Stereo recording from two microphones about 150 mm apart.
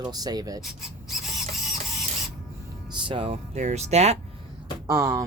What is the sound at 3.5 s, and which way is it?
Speech, 50° right (ahead or behind).